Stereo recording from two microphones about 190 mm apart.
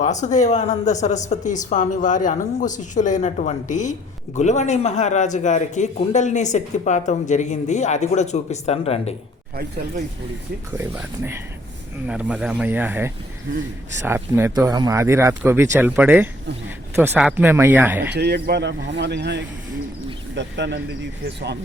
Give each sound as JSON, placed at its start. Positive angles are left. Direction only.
{"t": 0.0, "sound": "a woman's voice", "side_deg": 40}
{"t": 10.8, "sound": "speech", "side_deg": -10}
{"t": 18.1, "sound": "a man's voice", "side_deg": -60}